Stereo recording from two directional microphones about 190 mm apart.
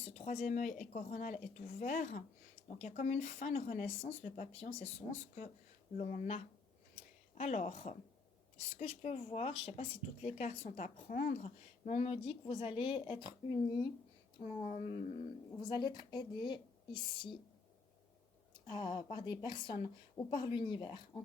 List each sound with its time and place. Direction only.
0.0 s speech: 35° left (ahead or behind)
14.3 s speech: 35° left (ahead or behind)
15.6 s a woman's voice: 20° left (ahead or behind)
18.5 s a woman's voice: 25° left (ahead or behind)